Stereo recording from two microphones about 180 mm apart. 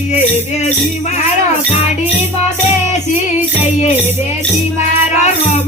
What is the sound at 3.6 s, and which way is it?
Music, 40° left (ahead or behind).